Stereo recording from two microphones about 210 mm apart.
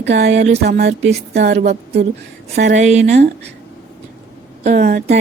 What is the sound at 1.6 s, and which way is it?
Speech, 35° right (ahead or behind).